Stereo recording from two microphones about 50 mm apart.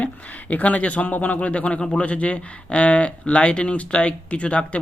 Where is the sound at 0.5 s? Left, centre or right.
Left.